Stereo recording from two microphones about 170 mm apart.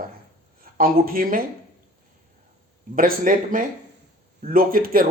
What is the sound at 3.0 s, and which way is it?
Speech, 55° right (ahead or behind).